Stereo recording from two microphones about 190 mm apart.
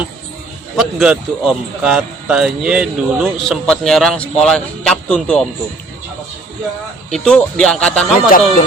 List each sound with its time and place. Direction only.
0.8 s a man's voice: 5° right (ahead or behind)
7.1 s a man's voice: 5° left (ahead or behind)
8.1 s speech: 45° left (ahead or behind)